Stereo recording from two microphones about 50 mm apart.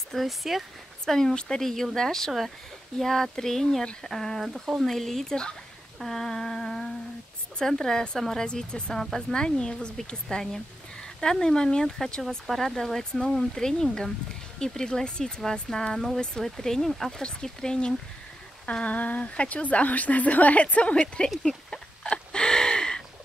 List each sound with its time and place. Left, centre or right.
0.1 s speech: centre
1.0 s speech: centre
8.5 s speech: centre
22.1 s a sound: centre